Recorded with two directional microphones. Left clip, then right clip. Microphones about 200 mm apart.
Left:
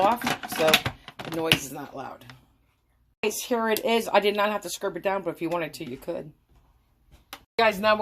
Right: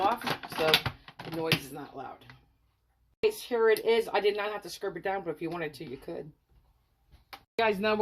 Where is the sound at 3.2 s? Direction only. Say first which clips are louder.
Even; 30° left (ahead or behind).